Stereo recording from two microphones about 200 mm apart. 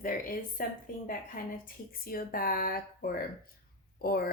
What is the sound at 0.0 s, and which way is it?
Speech, 45° left (ahead or behind).